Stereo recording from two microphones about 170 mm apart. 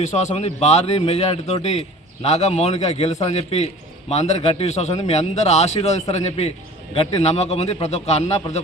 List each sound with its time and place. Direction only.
0.0 s a man's voice: 40° left (ahead or behind)